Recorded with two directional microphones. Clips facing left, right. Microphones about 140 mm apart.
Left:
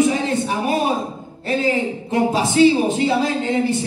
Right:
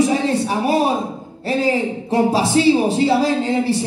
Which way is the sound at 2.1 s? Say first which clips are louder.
Right 1 dB; 30° right (ahead or behind).